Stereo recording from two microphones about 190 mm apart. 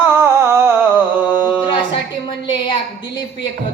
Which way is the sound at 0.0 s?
10° right (ahead or behind).